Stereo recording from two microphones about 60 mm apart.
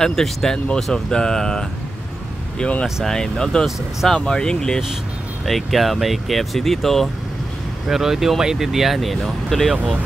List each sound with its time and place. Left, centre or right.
0.0 s speech: centre
5.4 s speech: centre